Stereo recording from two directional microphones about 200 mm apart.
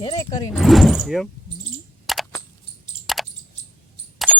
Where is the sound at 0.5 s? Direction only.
Centre (ahead or behind).